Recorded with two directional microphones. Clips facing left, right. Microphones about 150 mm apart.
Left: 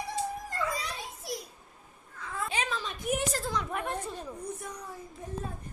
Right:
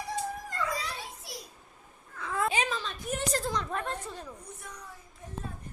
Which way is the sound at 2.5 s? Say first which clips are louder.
Right 2 dB; centre (ahead or behind).